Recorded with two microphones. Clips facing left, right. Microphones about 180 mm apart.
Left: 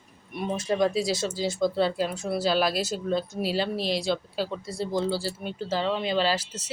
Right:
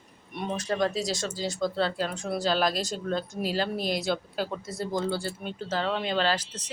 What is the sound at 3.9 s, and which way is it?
A woman's voice, centre (ahead or behind).